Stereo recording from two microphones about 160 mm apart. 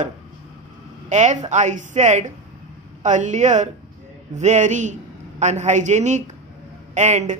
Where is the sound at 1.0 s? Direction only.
50° right (ahead or behind).